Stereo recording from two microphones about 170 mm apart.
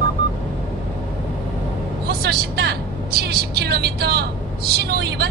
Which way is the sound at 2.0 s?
70° right (ahead or behind).